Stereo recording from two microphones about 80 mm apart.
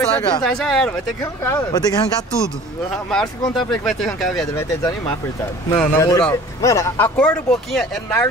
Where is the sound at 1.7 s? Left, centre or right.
Left.